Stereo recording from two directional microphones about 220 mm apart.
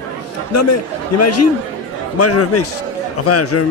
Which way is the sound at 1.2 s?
90° left.